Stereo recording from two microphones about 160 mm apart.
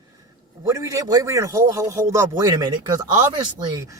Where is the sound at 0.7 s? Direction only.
20° right (ahead or behind).